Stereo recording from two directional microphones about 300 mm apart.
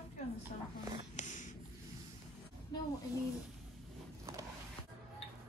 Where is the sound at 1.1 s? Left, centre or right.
Left.